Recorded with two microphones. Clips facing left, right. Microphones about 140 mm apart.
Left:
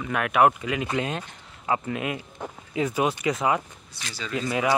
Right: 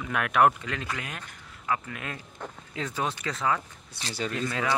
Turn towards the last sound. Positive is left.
turn(degrees=10)  # may be behind; listen again after turning